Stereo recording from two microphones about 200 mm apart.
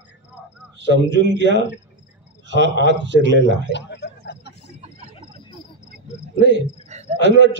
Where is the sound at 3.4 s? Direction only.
60° left (ahead or behind).